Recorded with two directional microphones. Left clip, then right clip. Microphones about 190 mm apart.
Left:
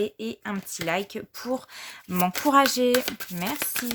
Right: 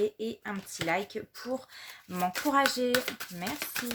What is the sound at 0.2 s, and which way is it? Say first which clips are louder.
Speech: left 3 dB; 45° left (ahead or behind).